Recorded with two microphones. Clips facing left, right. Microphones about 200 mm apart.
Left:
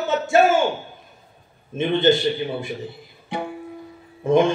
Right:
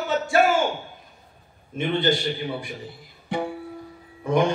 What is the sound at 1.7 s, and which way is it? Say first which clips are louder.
Speech: left 5 dB; 25° left (ahead or behind).